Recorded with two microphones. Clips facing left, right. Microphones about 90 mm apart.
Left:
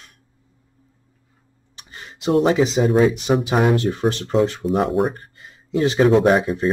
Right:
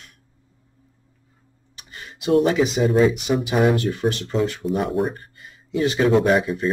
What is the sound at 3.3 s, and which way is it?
Speech, 50° left (ahead or behind).